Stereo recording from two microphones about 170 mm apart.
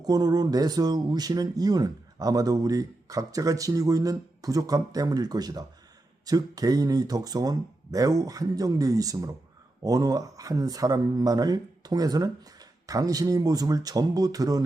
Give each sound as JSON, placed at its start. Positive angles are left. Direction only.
{"t": 0.0, "sound": "speech", "side_deg": -20}